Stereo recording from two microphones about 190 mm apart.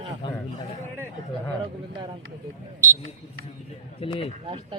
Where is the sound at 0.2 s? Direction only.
25° left (ahead or behind).